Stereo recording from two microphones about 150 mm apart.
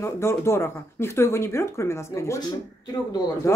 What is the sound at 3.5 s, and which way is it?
Speech, 20° left (ahead or behind).